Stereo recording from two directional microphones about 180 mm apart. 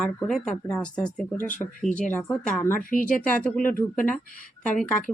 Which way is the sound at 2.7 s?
50° left (ahead or behind).